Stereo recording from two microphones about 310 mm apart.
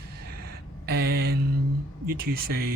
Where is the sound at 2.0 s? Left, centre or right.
Right.